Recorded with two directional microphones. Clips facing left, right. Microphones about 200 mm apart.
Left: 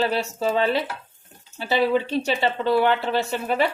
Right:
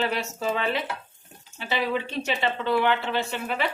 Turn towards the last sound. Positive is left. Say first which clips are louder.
# left 5 dB
turn(degrees=40)  # may be behind; listen again after turning